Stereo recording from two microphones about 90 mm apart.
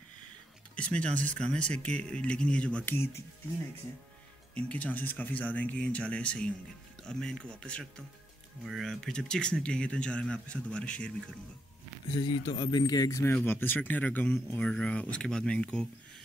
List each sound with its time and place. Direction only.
0.7 s speech: 15° left (ahead or behind)
4.6 s speech: 15° left (ahead or behind)
12.2 s speech: 50° left (ahead or behind)
13.2 s speech: 20° left (ahead or behind)